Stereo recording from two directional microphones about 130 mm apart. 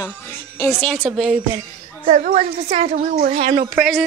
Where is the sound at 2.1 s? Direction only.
75° right (ahead or behind).